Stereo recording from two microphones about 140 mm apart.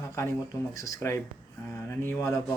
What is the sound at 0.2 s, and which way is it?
Speech, 20° left (ahead or behind).